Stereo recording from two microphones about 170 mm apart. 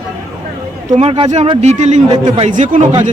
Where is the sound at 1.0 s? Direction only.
35° right (ahead or behind).